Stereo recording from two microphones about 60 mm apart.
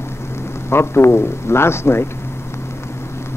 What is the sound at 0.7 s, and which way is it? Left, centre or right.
Speech, left.